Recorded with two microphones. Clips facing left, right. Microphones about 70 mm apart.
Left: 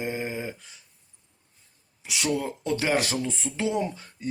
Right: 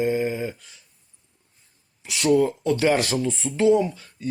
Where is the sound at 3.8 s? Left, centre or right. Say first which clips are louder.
Right 3 dB; left.